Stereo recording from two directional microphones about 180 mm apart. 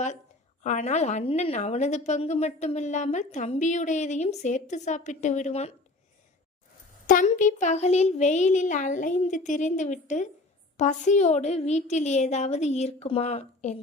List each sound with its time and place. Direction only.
0.6 s a woman's voice: 40° left (ahead or behind)
7.1 s a woman's voice: 45° left (ahead or behind)